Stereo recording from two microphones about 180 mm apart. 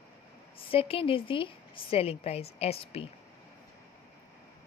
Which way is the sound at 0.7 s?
30° left (ahead or behind).